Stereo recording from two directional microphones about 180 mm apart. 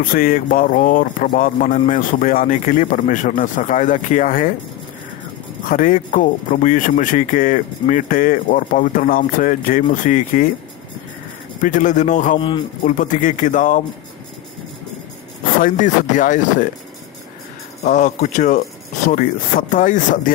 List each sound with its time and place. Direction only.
0.0 s speech: 50° left (ahead or behind)
5.7 s speech: 45° left (ahead or behind)
11.6 s speech: 45° left (ahead or behind)
12.4 s a man's voice: 25° left (ahead or behind)
12.8 s speech: 45° left (ahead or behind)
15.6 s speech: 45° left (ahead or behind)
17.8 s speech: 45° left (ahead or behind)
19.7 s speech: 45° left (ahead or behind)